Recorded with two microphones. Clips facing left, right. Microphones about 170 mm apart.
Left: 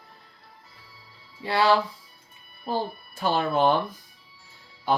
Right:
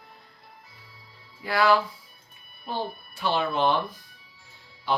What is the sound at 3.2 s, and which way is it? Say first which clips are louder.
Speech: left 2 dB; 45° left (ahead or behind).